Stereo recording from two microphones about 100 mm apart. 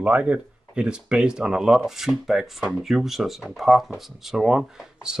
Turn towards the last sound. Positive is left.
turn(degrees=-5)  # may be behind; listen again after turning